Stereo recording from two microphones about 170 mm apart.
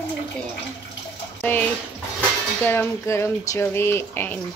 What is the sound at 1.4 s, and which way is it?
Speech, 10° left (ahead or behind).